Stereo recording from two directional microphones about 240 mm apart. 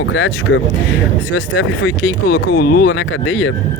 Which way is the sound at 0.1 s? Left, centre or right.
Left.